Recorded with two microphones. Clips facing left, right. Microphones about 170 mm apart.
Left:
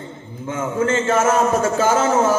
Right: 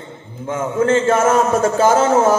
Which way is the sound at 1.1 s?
50° right (ahead or behind).